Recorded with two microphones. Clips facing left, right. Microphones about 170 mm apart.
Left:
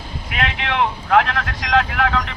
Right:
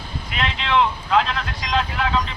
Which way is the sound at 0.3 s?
60° left (ahead or behind).